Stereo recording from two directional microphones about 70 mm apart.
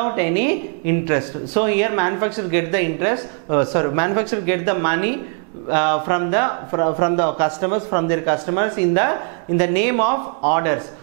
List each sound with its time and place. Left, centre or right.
0.0 s a woman's voice: centre